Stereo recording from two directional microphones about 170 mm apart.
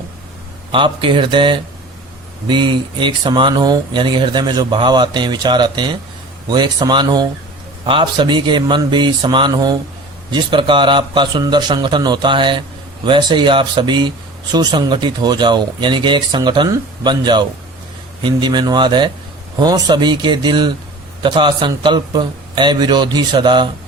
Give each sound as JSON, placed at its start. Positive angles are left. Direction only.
{"t": 0.7, "sound": "speech", "side_deg": -30}